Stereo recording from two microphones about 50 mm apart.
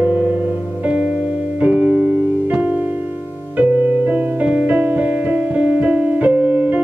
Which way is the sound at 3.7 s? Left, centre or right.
Right.